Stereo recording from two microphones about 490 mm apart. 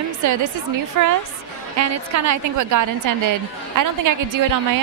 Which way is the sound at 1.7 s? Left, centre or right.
Right.